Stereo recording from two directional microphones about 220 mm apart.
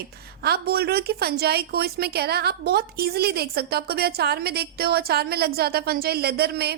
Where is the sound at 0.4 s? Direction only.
45° right (ahead or behind).